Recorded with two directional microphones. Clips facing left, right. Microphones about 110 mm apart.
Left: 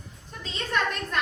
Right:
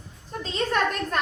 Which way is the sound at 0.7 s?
45° right (ahead or behind).